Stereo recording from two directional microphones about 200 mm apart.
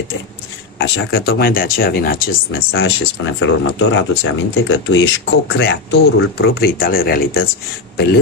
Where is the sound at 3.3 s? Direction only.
70° left (ahead or behind); by 7.2 s 45° left (ahead or behind).